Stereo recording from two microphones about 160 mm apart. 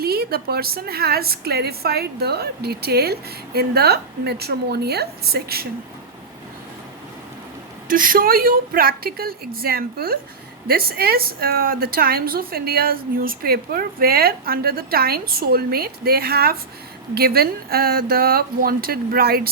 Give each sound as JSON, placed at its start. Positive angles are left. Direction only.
{"t": 0.0, "sound": "a woman's voice", "side_deg": -75}
{"t": 7.9, "sound": "a woman's voice", "side_deg": -60}